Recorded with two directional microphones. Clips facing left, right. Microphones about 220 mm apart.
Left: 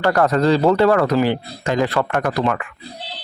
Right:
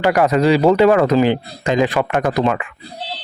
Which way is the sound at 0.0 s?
15° right (ahead or behind).